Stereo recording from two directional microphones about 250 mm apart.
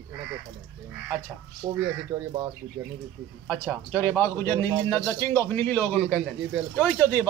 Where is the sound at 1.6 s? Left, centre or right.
Centre.